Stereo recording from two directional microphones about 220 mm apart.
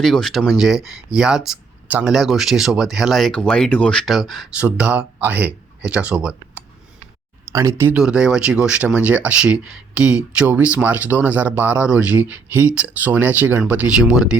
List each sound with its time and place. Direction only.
0.0 s speech: centre (ahead or behind)